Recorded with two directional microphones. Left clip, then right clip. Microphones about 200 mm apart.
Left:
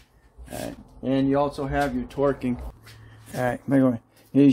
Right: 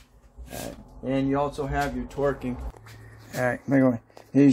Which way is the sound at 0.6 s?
50° left (ahead or behind).